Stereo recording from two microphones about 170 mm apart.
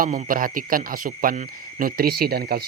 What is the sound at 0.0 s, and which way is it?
Speech, 50° right (ahead or behind).